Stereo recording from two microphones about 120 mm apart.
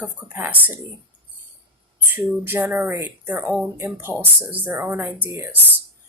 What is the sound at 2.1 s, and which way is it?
Speech, 15° right (ahead or behind).